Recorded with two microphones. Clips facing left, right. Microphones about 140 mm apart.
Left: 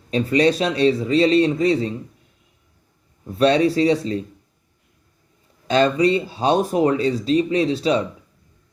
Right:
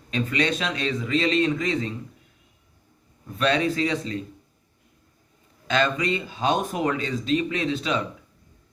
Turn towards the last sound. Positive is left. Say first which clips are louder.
# left 7 dB
turn(degrees=35)  # may be behind; listen again after turning